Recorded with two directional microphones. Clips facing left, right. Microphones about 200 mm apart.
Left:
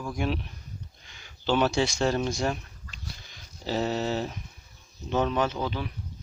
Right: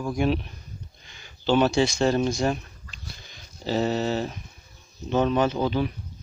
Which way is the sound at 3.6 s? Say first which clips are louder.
Right 3 dB; 10° left (ahead or behind).